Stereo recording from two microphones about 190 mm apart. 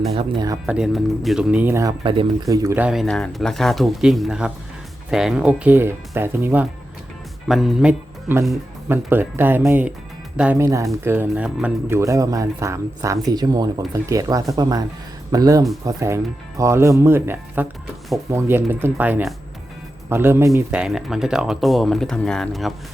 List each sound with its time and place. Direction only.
0.2 s speech: 20° right (ahead or behind)
0.6 s speech: 5° right (ahead or behind)